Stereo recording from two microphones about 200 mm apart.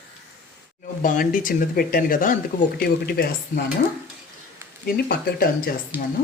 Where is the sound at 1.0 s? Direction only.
40° left (ahead or behind).